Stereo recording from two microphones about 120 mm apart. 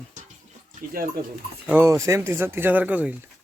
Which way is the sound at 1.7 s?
20° right (ahead or behind).